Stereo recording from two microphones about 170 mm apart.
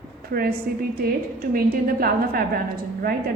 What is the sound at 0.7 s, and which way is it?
A woman's voice, 60° right (ahead or behind).